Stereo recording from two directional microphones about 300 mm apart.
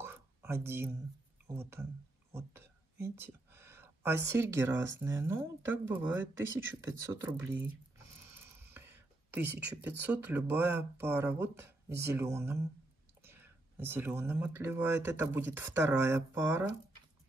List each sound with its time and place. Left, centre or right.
0.0 s a sound: centre
1.5 s speech: centre
2.3 s a sound: centre
4.3 s speech: centre
4.7 s speech: right
5.0 s speech: centre
8.7 s whispering: centre
9.8 s speech: centre